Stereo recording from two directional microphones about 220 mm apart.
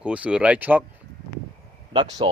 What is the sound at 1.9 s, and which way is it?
Speech, 20° right (ahead or behind).